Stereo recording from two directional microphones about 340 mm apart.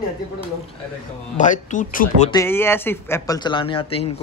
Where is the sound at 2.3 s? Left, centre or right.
Centre.